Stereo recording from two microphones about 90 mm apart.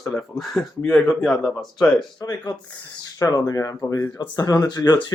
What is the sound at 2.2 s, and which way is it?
Speech, 50° left (ahead or behind).